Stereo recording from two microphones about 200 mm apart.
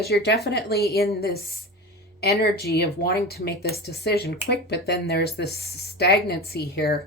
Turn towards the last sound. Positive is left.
turn(degrees=50)  # may be behind; listen again after turning